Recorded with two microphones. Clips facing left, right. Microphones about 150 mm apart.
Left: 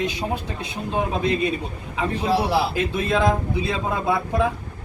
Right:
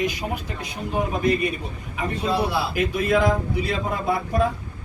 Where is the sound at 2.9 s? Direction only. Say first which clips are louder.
Right 1 dB; 25° left (ahead or behind).